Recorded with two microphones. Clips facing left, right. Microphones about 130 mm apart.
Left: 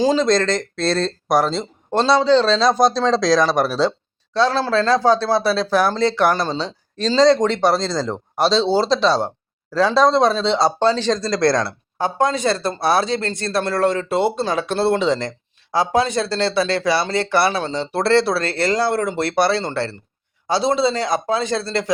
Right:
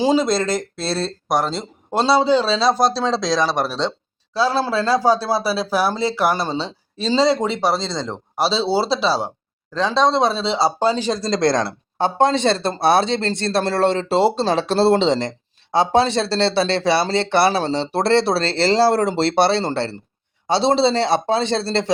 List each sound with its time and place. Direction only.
0.0 s speech: 10° right (ahead or behind)
4.4 s speech: 10° right (ahead or behind); by 21.9 s 30° right (ahead or behind)